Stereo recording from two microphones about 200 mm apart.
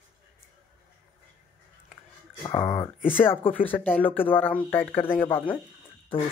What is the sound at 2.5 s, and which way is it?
Speech, 20° left (ahead or behind).